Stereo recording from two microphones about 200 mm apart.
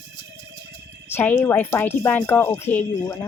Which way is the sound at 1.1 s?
10° left (ahead or behind).